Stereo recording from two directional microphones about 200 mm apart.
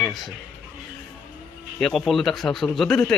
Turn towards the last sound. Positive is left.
turn(degrees=5)  # may be behind; listen again after turning